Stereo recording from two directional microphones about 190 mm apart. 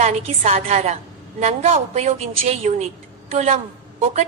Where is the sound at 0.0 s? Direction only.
35° right (ahead or behind).